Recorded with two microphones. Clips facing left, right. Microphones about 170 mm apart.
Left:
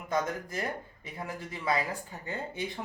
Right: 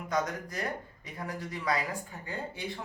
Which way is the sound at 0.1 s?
25° left (ahead or behind).